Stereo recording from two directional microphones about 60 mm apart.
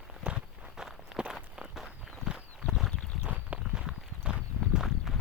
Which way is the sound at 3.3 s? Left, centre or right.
Right.